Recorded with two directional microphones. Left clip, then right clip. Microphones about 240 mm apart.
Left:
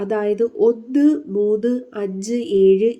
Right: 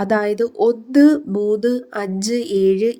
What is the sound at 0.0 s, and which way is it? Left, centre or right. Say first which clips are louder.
Speech: right 1 dB; right.